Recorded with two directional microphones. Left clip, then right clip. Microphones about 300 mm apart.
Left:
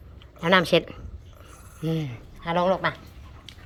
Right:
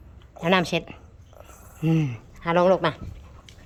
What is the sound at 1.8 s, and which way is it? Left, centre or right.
Speech, centre.